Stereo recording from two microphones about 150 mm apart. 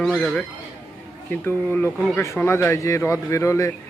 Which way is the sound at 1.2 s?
15° left (ahead or behind).